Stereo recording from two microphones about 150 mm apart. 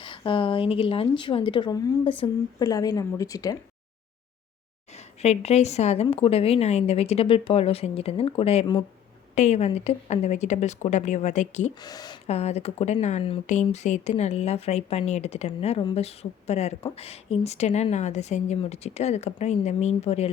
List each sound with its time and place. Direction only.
0.3 s a woman's voice: 35° left (ahead or behind)
4.9 s a woman's voice: 45° left (ahead or behind)
11.8 s a woman's voice: 25° left (ahead or behind)
12.3 s a woman's voice: 45° left (ahead or behind)